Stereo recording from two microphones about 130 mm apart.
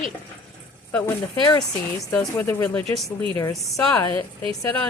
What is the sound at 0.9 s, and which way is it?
Speech, 20° left (ahead or behind).